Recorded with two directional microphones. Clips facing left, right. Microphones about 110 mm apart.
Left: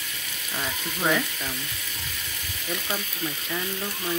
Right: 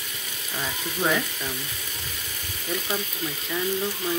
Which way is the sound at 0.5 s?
Centre (ahead or behind).